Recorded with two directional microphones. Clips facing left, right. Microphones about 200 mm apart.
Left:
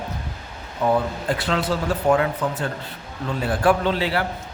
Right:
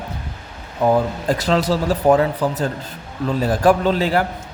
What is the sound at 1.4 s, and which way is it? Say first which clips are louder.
A man's voice: right 6 dB; 40° right (ahead or behind).